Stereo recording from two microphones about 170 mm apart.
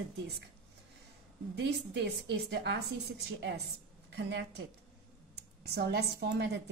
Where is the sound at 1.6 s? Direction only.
85° right.